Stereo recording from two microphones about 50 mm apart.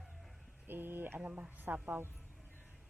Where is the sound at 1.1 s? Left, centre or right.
Right.